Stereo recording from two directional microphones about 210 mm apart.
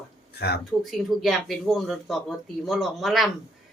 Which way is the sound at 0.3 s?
50° left (ahead or behind).